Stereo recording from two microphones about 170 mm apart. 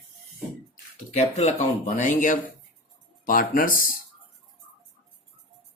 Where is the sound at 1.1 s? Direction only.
40° left (ahead or behind).